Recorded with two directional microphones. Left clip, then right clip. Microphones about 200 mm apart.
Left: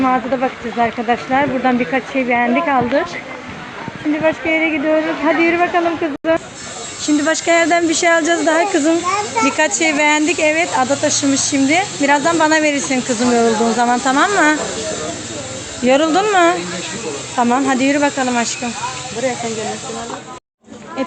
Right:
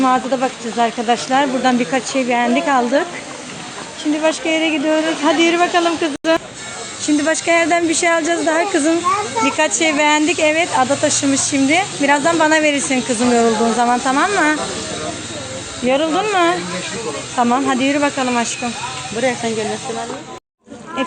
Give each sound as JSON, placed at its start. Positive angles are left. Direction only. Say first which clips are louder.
{"t": 0.0, "sound": "speech", "louder": "even", "side_deg": -15}
{"t": 4.2, "sound": "speech", "louder": "left 1 dB", "side_deg": -20}
{"t": 7.3, "sound": "speech", "louder": "left 1 dB", "side_deg": 10}
{"t": 15.8, "sound": "speech", "louder": "left 3 dB", "side_deg": 20}